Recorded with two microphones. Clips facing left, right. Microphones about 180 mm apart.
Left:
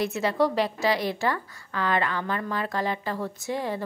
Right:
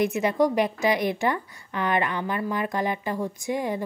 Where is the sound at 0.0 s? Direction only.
15° right (ahead or behind).